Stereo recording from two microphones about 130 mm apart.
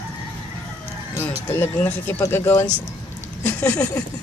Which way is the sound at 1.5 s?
15° left (ahead or behind).